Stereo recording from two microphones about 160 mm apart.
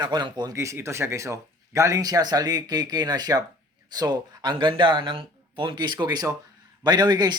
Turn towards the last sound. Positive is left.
turn(degrees=-25)  # may be behind; listen again after turning